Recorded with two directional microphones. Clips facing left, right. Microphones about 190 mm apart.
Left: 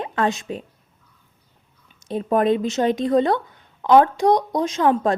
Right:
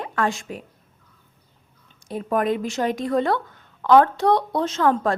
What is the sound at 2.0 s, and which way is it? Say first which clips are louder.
A woman's voice: left 4 dB; 25° left (ahead or behind).